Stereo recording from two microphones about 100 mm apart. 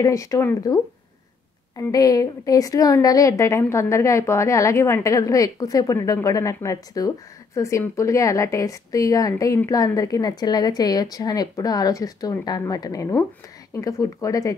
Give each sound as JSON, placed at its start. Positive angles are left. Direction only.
{"t": 0.0, "sound": "a woman's voice", "side_deg": 35}
{"t": 1.8, "sound": "a woman's voice", "side_deg": 35}